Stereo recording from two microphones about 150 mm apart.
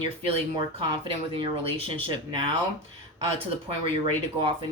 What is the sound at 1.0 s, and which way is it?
Speech, 40° right (ahead or behind).